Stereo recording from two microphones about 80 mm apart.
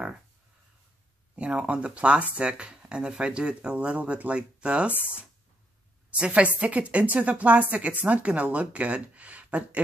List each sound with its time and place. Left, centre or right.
1.3 s speech: centre